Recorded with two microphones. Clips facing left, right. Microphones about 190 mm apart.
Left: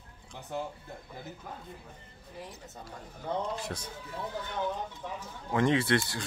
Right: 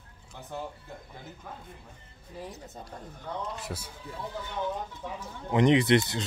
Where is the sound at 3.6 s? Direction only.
5° right (ahead or behind).